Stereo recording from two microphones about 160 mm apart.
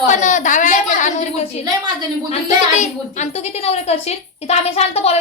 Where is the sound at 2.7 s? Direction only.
45° left (ahead or behind).